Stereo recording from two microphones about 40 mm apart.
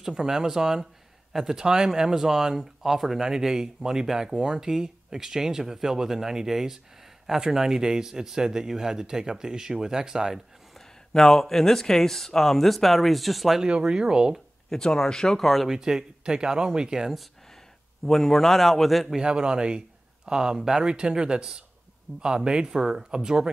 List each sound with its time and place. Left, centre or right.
0.0 s speech: centre
11.1 s speech: centre
13.6 s speech: right
14.7 s speech: centre
15.7 s speech: centre
18.0 s speech: centre
19.1 s speech: right